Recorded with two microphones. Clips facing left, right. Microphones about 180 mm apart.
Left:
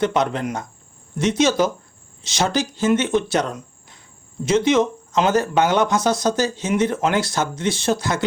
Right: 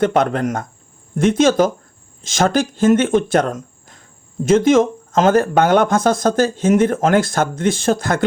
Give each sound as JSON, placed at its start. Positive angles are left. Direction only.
{"t": 0.0, "sound": "speech", "side_deg": -50}